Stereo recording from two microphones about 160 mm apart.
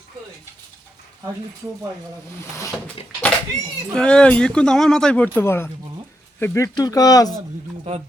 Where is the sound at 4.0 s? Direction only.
5° left (ahead or behind); by 7.4 s 25° left (ahead or behind).